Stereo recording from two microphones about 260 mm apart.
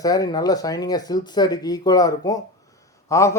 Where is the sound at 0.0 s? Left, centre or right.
Centre.